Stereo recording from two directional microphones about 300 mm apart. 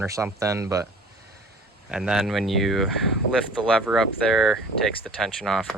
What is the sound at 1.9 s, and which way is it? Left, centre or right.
Speech, centre.